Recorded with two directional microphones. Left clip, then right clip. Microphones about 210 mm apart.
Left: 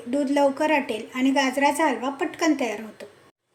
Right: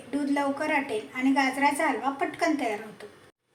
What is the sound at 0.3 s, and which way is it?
A woman's voice, 50° left (ahead or behind).